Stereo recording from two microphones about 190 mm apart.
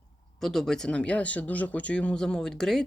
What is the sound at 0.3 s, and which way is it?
Speech, centre (ahead or behind).